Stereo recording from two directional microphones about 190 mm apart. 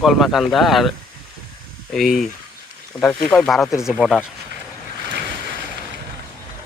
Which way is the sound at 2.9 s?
20° left (ahead or behind).